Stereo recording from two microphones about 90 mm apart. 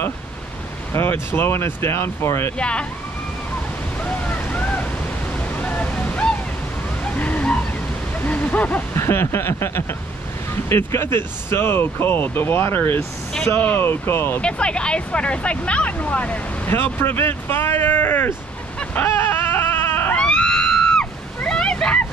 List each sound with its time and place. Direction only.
0.9 s speech: 25° left (ahead or behind)
2.6 s speech: 10° left (ahead or behind)
4.0 s waves: 15° left (ahead or behind)
5.6 s waterfall: 15° left (ahead or behind)
7.2 s a sound: 15° left (ahead or behind)
8.9 s speech: 30° left (ahead or behind)
14.4 s speech: 10° left (ahead or behind)
19.0 s a sound: 30° left (ahead or behind)
20.2 s a sound: 10° left (ahead or behind)